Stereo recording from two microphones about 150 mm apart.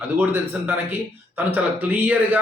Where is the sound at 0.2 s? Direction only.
10° right (ahead or behind).